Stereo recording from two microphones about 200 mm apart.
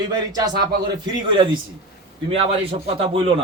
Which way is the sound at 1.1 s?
25° right (ahead or behind).